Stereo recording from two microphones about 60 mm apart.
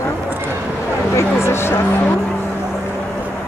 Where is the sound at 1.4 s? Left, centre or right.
Left.